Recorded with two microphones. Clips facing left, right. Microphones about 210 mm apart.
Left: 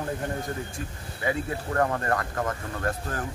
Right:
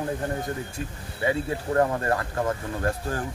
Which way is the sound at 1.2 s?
25° right (ahead or behind).